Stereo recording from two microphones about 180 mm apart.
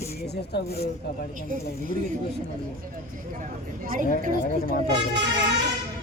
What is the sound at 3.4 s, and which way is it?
Speech, 50° right (ahead or behind).